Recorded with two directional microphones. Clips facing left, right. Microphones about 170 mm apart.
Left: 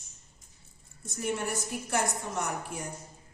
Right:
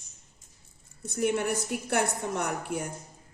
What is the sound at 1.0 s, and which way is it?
Speech, 60° right (ahead or behind).